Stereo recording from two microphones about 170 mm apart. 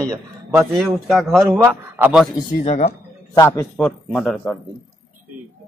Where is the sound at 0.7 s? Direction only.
Centre (ahead or behind).